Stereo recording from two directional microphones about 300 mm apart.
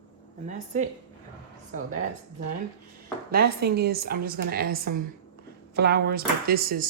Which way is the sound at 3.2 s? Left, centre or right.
Right.